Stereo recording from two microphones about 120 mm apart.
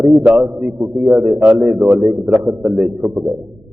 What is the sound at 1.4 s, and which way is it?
Speech, 15° right (ahead or behind).